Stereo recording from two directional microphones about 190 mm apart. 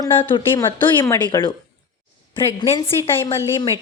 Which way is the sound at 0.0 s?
25° left (ahead or behind).